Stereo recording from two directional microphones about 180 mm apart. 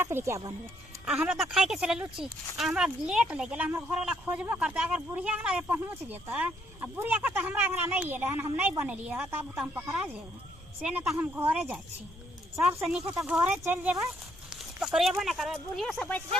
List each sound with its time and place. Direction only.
0.0 s speech: 15° right (ahead or behind)
1.0 s speech: 5° right (ahead or behind)
12.8 s speech: centre (ahead or behind)